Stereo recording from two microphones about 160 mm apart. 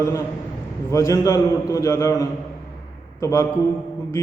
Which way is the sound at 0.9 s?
20° left (ahead or behind).